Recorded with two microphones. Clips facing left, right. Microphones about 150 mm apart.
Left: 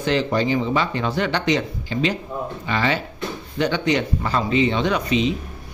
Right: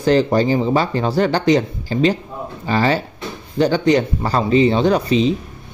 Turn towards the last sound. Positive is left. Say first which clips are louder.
# right 5 dB
turn(degrees=-35)  # may be behind; listen again after turning